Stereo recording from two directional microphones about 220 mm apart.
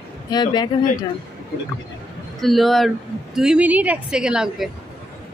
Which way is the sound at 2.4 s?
Centre (ahead or behind).